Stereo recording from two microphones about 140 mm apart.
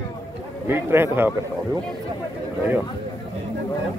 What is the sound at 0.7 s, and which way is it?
Speech, 15° right (ahead or behind).